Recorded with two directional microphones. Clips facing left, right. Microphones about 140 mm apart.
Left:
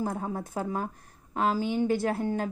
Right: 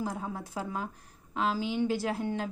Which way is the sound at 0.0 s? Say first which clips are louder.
Left 4 dB; 45° left (ahead or behind).